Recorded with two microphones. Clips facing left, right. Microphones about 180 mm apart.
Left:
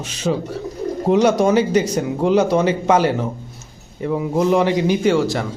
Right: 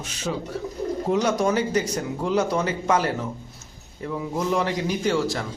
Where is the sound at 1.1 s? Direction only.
80° left.